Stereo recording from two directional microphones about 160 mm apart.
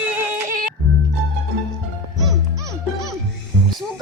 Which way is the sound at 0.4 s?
55° right (ahead or behind).